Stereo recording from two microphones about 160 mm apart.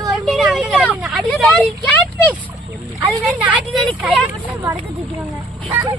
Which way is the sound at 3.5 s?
Centre (ahead or behind).